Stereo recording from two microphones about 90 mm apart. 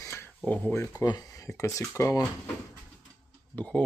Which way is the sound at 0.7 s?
40° left (ahead or behind).